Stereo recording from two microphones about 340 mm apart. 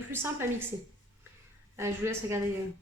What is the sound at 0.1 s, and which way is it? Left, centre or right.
Speech, centre.